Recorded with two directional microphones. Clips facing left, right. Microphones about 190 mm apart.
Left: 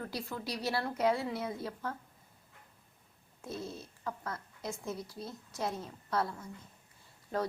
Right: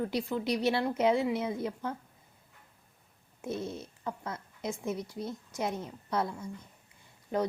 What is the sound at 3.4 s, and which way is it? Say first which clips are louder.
Speech: right 5 dB; 20° right (ahead or behind).